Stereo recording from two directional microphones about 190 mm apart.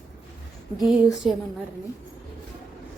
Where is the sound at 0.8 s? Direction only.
Centre (ahead or behind).